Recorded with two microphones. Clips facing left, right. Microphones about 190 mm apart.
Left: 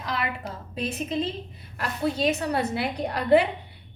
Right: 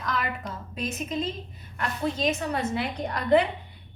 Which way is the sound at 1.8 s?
35° left (ahead or behind).